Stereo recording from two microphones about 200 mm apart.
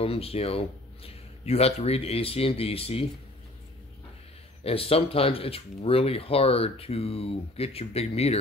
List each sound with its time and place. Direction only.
0.0 s speech: 30° left (ahead or behind)
4.6 s speech: 30° left (ahead or behind)